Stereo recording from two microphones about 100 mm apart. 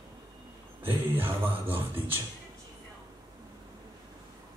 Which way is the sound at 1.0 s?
20° right (ahead or behind).